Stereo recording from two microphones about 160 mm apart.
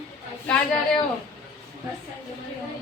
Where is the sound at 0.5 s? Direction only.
5° left (ahead or behind).